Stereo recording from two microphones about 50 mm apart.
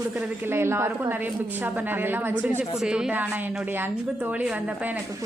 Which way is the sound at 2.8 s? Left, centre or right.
Centre.